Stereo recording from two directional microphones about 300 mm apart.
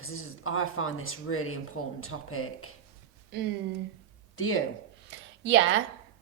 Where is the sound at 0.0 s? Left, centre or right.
Left.